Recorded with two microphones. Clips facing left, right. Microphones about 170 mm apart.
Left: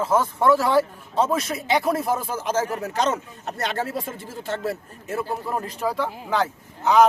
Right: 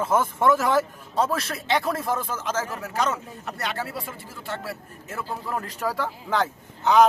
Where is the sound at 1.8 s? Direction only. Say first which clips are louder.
Left 4 dB; 25° left (ahead or behind).